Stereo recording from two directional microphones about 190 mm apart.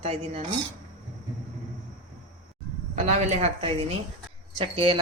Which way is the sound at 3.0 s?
35° right (ahead or behind).